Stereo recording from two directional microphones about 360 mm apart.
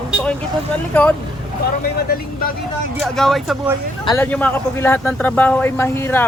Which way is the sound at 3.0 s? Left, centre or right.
Centre.